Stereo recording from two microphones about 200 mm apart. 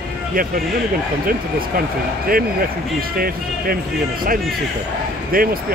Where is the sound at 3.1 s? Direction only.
45° right (ahead or behind).